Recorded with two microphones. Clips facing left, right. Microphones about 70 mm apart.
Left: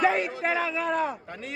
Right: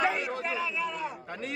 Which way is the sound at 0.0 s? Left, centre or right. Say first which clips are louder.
Left 5 dB; left.